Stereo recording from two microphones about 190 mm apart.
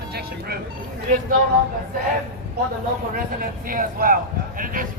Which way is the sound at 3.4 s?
45° right (ahead or behind).